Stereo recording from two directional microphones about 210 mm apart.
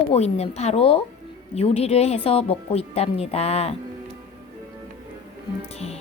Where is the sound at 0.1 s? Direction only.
30° left (ahead or behind).